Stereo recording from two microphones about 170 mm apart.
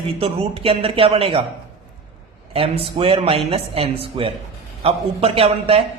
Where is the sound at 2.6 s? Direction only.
30° right (ahead or behind).